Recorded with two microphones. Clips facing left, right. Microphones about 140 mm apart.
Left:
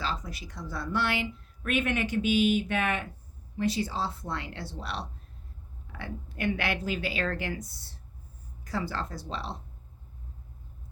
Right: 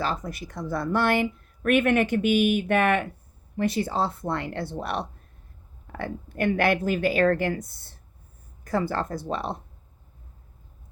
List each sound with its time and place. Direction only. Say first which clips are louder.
0.0 s a woman's voice: right 6 dB; 50° right (ahead or behind)